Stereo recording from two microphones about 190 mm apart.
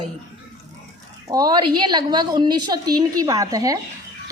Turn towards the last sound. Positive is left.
turn(degrees=-20)  # may be behind; listen again after turning